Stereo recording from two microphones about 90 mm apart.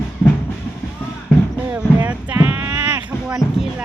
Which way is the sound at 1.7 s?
20° right (ahead or behind).